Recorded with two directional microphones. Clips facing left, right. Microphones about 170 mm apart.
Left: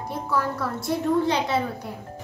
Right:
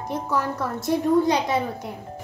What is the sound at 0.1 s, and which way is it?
A woman's voice, 20° right (ahead or behind).